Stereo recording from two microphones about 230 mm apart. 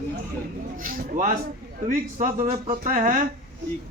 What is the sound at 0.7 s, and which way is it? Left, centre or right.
A man's voice, right.